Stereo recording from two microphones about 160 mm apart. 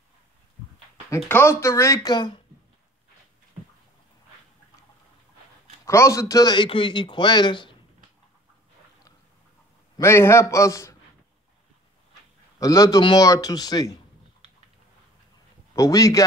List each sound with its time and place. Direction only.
1.1 s speech: 15° left (ahead or behind)
5.9 s a man's voice: 20° left (ahead or behind)
9.9 s a man's voice: 15° left (ahead or behind)
12.5 s a man's voice: 20° left (ahead or behind)
15.7 s a man's voice: 20° left (ahead or behind)